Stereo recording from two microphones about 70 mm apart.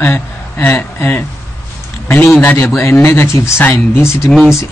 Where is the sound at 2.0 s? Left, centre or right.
Left.